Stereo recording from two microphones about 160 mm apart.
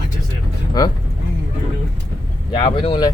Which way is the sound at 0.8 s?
25° left (ahead or behind).